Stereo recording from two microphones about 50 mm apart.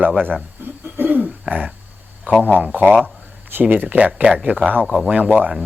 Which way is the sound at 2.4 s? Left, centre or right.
Right.